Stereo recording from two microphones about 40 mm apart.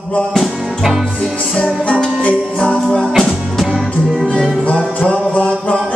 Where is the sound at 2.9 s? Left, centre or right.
Centre.